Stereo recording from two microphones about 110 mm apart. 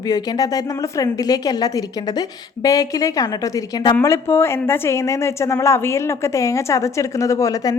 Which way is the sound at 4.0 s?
25° left (ahead or behind).